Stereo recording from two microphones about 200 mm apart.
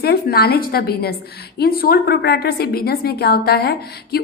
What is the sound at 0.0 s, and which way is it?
A woman's voice, 50° left (ahead or behind).